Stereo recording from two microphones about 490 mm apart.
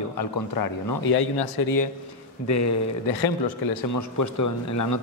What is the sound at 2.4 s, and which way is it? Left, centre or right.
Speech, left.